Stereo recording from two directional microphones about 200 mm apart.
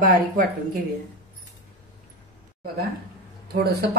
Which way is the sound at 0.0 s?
45° right (ahead or behind).